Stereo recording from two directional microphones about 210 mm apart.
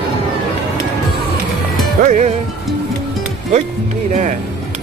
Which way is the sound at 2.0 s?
35° right (ahead or behind).